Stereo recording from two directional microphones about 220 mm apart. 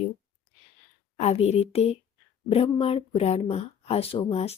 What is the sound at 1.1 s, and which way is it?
Speech, 30° left (ahead or behind).